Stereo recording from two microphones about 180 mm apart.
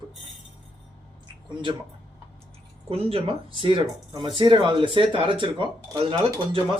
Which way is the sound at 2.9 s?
30° right (ahead or behind).